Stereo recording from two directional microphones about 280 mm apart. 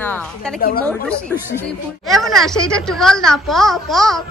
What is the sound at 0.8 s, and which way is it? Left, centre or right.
A woman's voice, centre.